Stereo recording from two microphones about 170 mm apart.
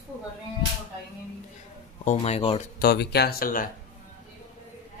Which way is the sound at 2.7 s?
70° left (ahead or behind).